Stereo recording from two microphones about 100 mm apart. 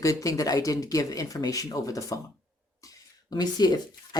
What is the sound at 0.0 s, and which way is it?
Speech, 35° left (ahead or behind).